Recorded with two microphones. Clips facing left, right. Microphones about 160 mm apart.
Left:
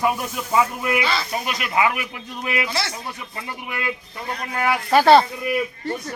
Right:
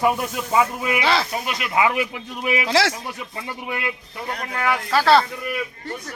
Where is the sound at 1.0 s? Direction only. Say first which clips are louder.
Right 4 dB; 90° right.